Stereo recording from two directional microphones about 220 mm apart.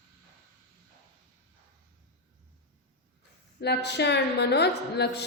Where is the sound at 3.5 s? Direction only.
50° left (ahead or behind).